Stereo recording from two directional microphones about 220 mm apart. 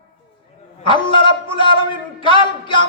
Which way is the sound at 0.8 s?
20° left (ahead or behind).